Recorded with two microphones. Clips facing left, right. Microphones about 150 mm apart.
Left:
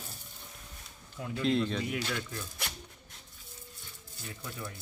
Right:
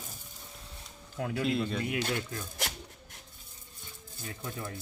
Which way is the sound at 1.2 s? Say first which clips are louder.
Right 5 dB; 75° right (ahead or behind).